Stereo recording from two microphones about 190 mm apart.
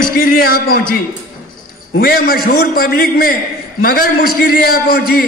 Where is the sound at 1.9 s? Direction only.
50° left (ahead or behind).